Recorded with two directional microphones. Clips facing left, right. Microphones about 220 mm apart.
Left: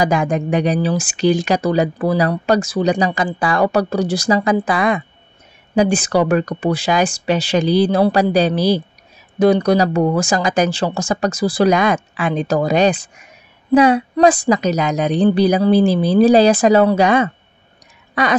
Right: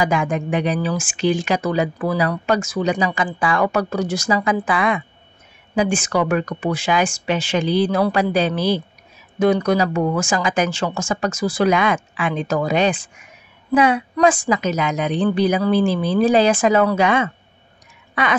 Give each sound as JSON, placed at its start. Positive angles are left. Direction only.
{"t": 0.0, "sound": "speech", "side_deg": 40}